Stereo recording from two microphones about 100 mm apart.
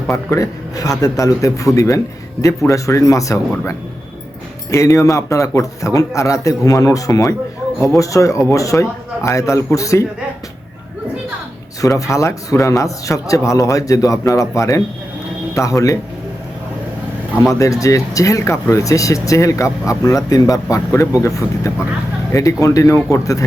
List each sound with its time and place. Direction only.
0.1 s a man's voice: 30° left (ahead or behind)
4.7 s a man's voice: 30° left (ahead or behind)
11.8 s a man's voice: 35° left (ahead or behind)
17.4 s a man's voice: 35° left (ahead or behind)